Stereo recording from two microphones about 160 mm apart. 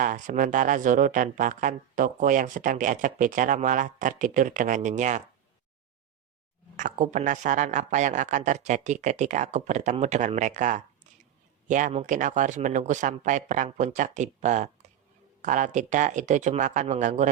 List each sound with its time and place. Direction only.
0.0 s speech: 55° right (ahead or behind)
6.7 s speech: 50° right (ahead or behind)